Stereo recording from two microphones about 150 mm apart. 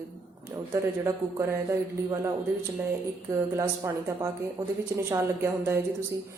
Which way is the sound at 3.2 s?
20° right (ahead or behind).